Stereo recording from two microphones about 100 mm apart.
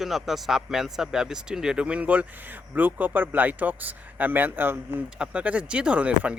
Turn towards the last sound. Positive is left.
turn(degrees=-10)  # may be behind; listen again after turning